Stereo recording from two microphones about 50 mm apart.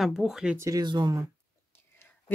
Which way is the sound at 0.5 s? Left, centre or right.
Right.